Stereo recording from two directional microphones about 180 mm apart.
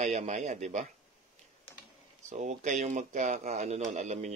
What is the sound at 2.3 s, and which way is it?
Speech, 45° right (ahead or behind).